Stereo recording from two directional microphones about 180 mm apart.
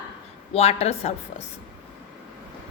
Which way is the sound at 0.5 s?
35° left (ahead or behind).